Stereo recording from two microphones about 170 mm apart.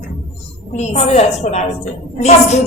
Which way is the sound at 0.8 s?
40° left (ahead or behind).